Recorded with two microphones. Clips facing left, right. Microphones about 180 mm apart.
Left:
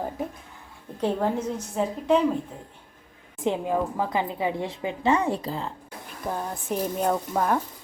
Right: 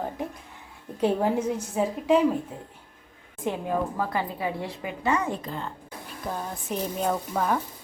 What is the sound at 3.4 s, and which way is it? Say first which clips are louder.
A woman's voice: left 2 dB; 20° left (ahead or behind).